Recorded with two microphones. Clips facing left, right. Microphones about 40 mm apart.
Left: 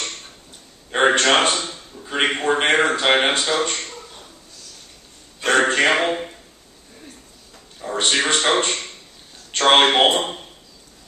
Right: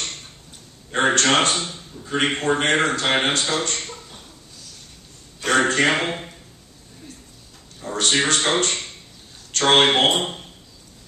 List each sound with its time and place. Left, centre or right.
0.9 s a man's voice: left
5.4 s a sound: centre
5.7 s speech: left
7.8 s a man's voice: centre
9.5 s a sound: left
9.8 s a man's voice: centre